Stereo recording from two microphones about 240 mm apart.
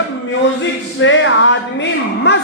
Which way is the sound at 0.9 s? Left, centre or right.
Left.